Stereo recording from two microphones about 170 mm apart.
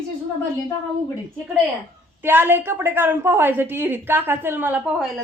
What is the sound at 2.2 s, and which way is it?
A woman's voice, 10° right (ahead or behind).